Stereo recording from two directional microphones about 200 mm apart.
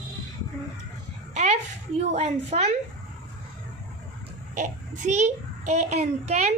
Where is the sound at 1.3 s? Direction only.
35° right (ahead or behind).